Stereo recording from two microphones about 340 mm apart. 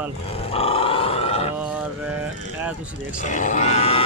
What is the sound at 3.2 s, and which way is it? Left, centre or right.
Speech, left.